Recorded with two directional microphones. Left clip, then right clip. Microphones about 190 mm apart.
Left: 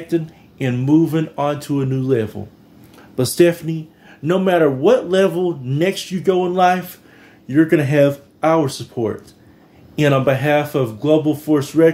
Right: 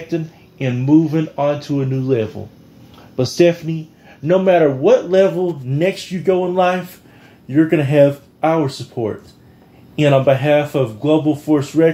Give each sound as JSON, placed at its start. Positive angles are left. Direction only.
{"t": 0.1, "sound": "speech", "side_deg": 20}
{"t": 4.8, "sound": "speech", "side_deg": 25}